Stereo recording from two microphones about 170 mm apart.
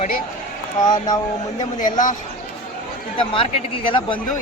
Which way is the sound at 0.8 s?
25° left (ahead or behind).